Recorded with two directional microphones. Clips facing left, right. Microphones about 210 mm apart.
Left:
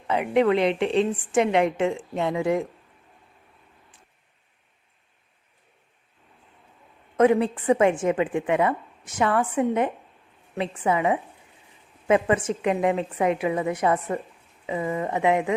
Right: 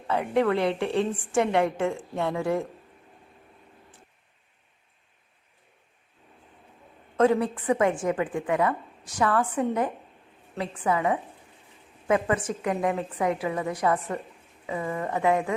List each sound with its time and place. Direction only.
0.1 s a woman's voice: 20° left (ahead or behind)
7.2 s a woman's voice: 20° left (ahead or behind)